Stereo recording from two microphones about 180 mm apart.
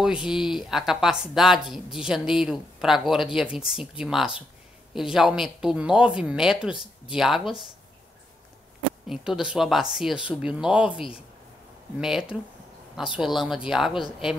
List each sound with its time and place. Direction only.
0.0 s speech: 5° right (ahead or behind)
9.0 s speech: 5° right (ahead or behind)